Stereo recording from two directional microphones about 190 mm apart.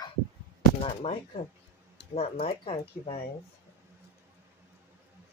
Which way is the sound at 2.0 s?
65° left (ahead or behind).